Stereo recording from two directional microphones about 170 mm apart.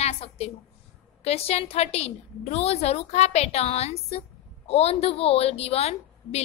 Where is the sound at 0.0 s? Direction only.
40° left (ahead or behind).